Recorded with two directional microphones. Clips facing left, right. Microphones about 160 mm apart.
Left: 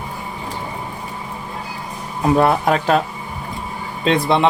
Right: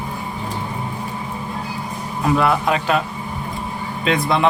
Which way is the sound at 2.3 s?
45° left (ahead or behind).